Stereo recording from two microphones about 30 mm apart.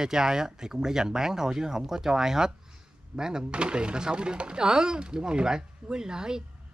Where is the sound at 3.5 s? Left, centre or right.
Right.